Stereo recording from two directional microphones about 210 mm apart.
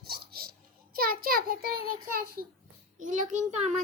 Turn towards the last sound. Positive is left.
turn(degrees=-35)  # may be behind; listen again after turning